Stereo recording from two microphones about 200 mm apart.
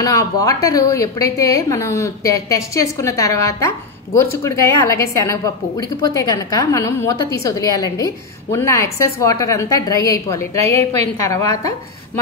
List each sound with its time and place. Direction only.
0.0 s a woman's voice: 15° left (ahead or behind)